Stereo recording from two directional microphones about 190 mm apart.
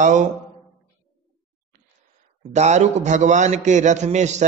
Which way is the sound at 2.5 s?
35° right (ahead or behind).